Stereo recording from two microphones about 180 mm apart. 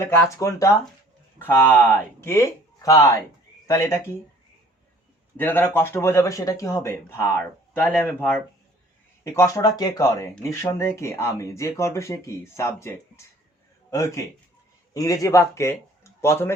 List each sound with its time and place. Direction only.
0.0 s speech: 15° left (ahead or behind)
5.4 s speech: 10° left (ahead or behind)